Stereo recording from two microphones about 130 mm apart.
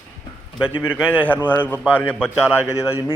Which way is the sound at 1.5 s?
15° left (ahead or behind).